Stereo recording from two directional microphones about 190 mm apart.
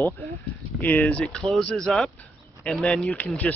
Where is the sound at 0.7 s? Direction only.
10° left (ahead or behind).